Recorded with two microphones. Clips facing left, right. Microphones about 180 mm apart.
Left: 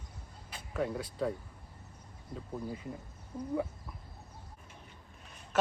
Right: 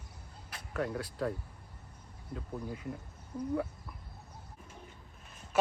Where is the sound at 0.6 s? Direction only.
Centre (ahead or behind).